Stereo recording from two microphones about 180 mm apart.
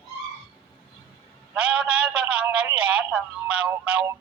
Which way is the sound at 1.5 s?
5° right (ahead or behind).